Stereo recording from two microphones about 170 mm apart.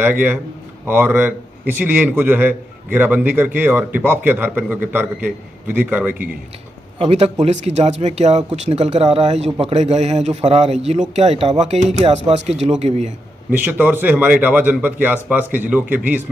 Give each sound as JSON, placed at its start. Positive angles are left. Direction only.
{"t": 0.0, "sound": "a man's voice", "side_deg": -10}
{"t": 7.0, "sound": "speech", "side_deg": -35}
{"t": 13.5, "sound": "a man's voice", "side_deg": -10}